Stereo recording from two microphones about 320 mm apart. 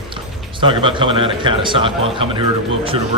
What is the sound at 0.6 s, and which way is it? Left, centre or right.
Speech, centre.